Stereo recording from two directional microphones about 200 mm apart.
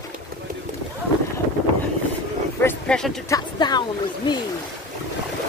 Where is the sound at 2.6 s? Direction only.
10° left (ahead or behind).